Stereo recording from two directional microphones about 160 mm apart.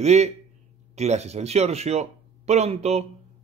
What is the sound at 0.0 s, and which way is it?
A man's voice, 45° right (ahead or behind).